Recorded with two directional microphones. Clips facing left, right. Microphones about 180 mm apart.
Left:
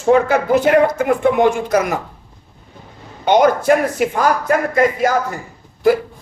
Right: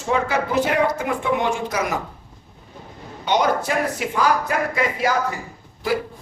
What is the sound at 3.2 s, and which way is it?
Speech, 50° left (ahead or behind).